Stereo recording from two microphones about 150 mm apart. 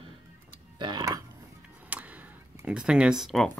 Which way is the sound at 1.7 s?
10° right (ahead or behind).